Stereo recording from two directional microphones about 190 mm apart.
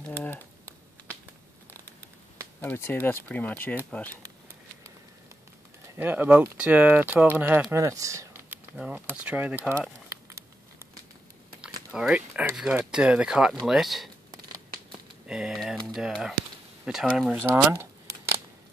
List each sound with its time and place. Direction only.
2.6 s speech: 10° left (ahead or behind)
4.2 s a sound: 15° right (ahead or behind)
5.9 s speech: 10° right (ahead or behind)
11.9 s speech: 5° right (ahead or behind)
15.2 s speech: 5° right (ahead or behind)
17.4 s shuffling cards: 10° right (ahead or behind)